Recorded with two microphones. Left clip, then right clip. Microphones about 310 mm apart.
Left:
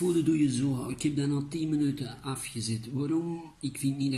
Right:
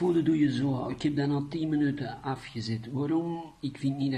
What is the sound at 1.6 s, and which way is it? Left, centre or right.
A man's voice, right.